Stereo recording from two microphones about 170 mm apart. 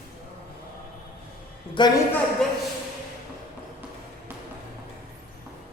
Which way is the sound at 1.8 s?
25° left (ahead or behind).